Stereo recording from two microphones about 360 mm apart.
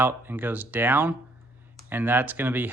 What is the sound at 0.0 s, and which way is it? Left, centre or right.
Speech, centre.